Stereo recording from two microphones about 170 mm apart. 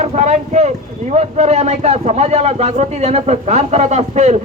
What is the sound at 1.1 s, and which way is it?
A man's voice, 40° right (ahead or behind).